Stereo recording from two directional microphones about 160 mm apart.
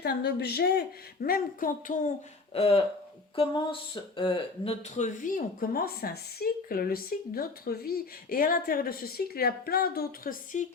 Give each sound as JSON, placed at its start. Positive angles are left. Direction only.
{"t": 0.0, "sound": "a woman's voice", "side_deg": 90}
{"t": 2.5, "sound": "a sound", "side_deg": 40}
{"t": 4.2, "sound": "speech", "side_deg": 30}
{"t": 10.5, "sound": "a woman's voice", "side_deg": 50}